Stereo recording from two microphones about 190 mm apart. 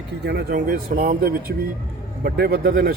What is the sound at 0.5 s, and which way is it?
Speech, 45° right (ahead or behind).